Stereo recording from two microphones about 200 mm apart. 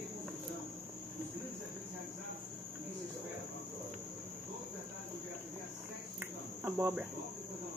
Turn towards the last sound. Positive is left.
turn(degrees=-10)  # may be behind; listen again after turning